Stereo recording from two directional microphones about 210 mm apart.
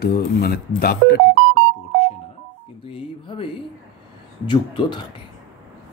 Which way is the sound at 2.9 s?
25° left (ahead or behind).